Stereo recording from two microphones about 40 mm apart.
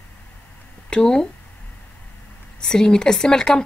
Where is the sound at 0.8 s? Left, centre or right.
Left.